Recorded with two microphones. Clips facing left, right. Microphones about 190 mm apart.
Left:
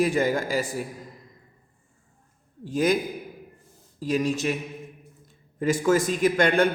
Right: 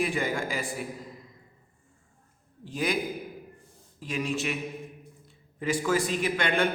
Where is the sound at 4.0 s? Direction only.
40° left (ahead or behind).